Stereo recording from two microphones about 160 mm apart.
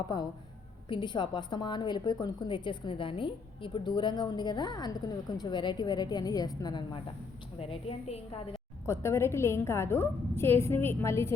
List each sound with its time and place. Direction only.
0.1 s a woman's voice: 25° left (ahead or behind)
8.9 s a woman's voice: 15° left (ahead or behind)